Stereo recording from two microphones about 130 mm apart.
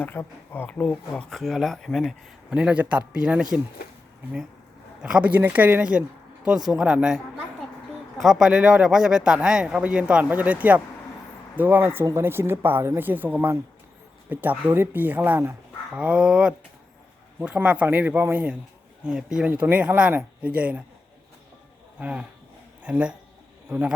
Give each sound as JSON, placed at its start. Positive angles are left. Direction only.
{"t": 0.0, "sound": "speech", "side_deg": 15}
{"t": 2.5, "sound": "speech", "side_deg": -10}
{"t": 4.9, "sound": "speech", "side_deg": -5}
{"t": 8.2, "sound": "speech", "side_deg": 0}
{"t": 21.9, "sound": "speech", "side_deg": -10}